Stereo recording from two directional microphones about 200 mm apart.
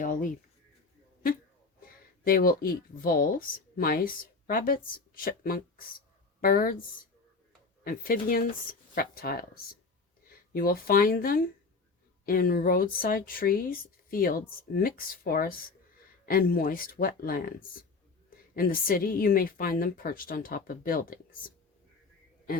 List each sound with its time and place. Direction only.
0.0 s a sound: 45° left (ahead or behind)
2.2 s speech: 45° left (ahead or behind)
7.9 s speech: 45° left (ahead or behind)